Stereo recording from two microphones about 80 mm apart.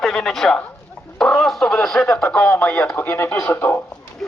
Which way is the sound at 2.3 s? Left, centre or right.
Centre.